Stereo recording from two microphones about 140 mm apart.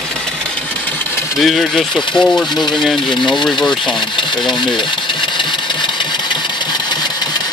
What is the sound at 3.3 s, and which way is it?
Speech, 5° left (ahead or behind).